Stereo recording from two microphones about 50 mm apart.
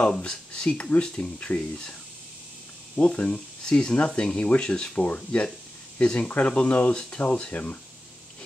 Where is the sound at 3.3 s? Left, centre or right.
Centre.